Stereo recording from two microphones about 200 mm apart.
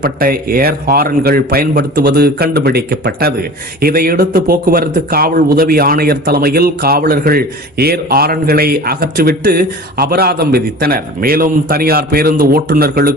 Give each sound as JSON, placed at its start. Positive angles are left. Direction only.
{"t": 0.0, "sound": "speech", "side_deg": -50}